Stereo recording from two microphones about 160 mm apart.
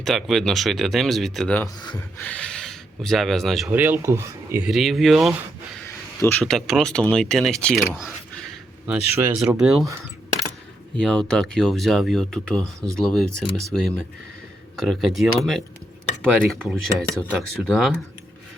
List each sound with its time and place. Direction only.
0.0 s speech: centre (ahead or behind)
1.6 s speech: 30° left (ahead or behind)
2.0 s speech: 10° left (ahead or behind)
3.7 s speech: 10° right (ahead or behind)
4.6 s speech: centre (ahead or behind)
6.4 s speech: centre (ahead or behind)
7.9 s keys jangling: centre (ahead or behind)
8.9 s speech: 15° right (ahead or behind)
10.9 s speech: 5° left (ahead or behind)